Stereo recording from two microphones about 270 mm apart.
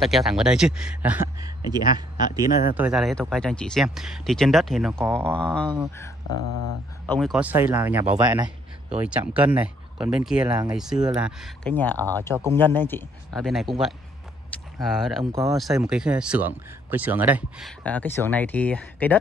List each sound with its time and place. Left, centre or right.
0.0 s speech: centre
2.7 s speech: centre
6.3 s speech: right
7.1 s speech: centre
14.5 s a sound: centre
15.5 s speech: centre